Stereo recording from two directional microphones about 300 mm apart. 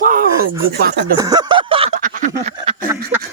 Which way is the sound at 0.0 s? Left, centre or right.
Right.